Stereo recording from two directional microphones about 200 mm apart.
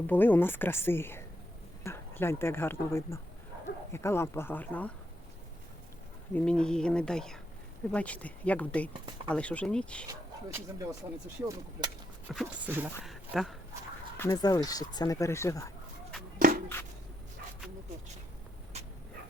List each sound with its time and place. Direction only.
0.1 s speech: 10° left (ahead or behind)
6.3 s speech: 5° left (ahead or behind)
10.1 s speech: 15° right (ahead or behind); by 13.6 s centre (ahead or behind)
14.2 s speech: 20° left (ahead or behind)
16.7 s a sound: 10° left (ahead or behind)